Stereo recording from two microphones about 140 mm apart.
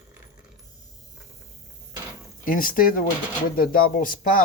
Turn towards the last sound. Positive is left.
turn(degrees=90)